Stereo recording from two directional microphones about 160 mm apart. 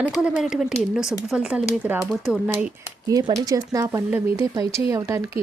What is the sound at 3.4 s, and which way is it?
Speech, 25° right (ahead or behind).